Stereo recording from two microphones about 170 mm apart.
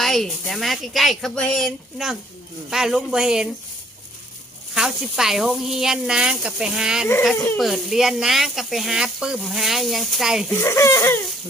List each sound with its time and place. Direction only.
0.0 s speech: centre (ahead or behind)
4.7 s speech: 5° right (ahead or behind)
7.3 s speech: 15° left (ahead or behind)
7.6 s speech: centre (ahead or behind)
10.6 s speech: 15° left (ahead or behind)